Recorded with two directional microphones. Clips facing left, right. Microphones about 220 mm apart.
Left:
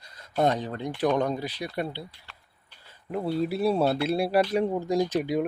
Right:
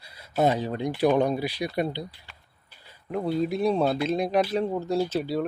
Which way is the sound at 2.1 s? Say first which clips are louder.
Right 3 dB; 5° right (ahead or behind).